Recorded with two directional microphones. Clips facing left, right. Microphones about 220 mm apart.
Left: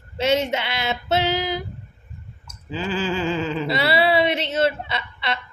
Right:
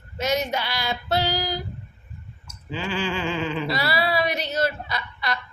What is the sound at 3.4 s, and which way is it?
Speech, 30° left (ahead or behind).